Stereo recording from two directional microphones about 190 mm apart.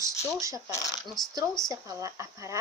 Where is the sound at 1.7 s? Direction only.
15° right (ahead or behind).